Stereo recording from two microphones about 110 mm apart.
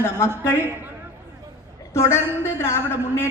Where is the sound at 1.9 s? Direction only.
25° left (ahead or behind).